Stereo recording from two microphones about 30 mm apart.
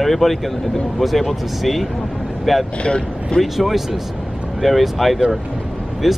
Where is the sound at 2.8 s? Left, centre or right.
Left.